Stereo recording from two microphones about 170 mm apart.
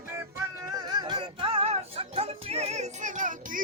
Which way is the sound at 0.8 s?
25° right (ahead or behind).